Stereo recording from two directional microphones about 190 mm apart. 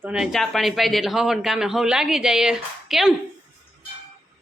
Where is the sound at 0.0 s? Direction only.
5° right (ahead or behind).